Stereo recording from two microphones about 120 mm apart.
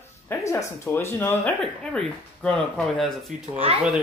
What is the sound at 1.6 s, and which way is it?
Speech, 5° left (ahead or behind).